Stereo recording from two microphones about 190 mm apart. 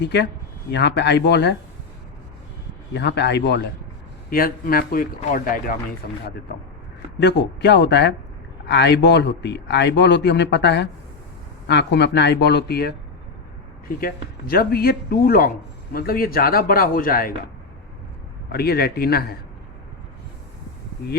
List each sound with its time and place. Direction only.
0.0 s speech: 65° left (ahead or behind)
2.9 s speech: 65° left (ahead or behind)
4.3 s speech: 50° left (ahead or behind)
7.2 s speech: 65° left (ahead or behind); by 17.3 s 50° left (ahead or behind)
18.5 s speech: 55° left (ahead or behind)